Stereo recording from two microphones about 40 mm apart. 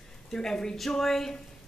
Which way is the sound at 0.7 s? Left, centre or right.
Centre.